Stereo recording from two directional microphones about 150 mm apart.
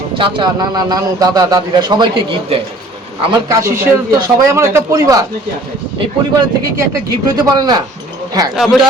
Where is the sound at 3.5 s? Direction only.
20° right (ahead or behind).